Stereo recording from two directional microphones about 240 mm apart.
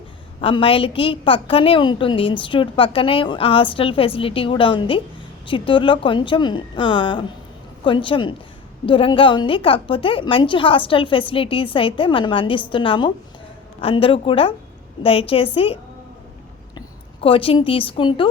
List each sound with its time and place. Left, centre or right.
0.4 s a woman's voice: left